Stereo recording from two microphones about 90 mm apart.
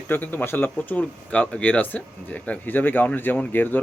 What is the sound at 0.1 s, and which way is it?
Speech, 20° left (ahead or behind).